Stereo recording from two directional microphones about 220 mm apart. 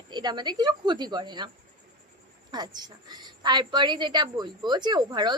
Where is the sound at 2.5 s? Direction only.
20° right (ahead or behind).